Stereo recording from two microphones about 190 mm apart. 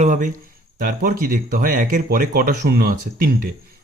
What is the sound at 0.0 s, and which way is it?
Speech, 40° right (ahead or behind).